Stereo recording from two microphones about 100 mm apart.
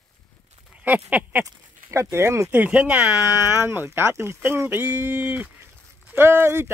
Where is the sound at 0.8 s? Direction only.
15° right (ahead or behind).